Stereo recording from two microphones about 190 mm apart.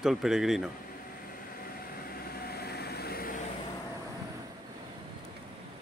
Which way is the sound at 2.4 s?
55° left (ahead or behind).